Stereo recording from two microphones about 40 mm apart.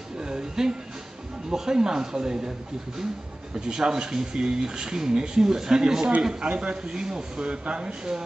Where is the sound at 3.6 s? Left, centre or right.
Centre.